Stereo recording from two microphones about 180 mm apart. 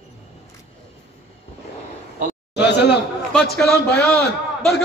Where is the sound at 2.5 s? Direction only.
70° left (ahead or behind).